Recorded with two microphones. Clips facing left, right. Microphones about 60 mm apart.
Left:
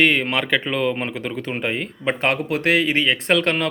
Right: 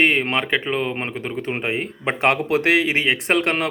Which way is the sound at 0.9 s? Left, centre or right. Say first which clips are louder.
Left 1 dB; right.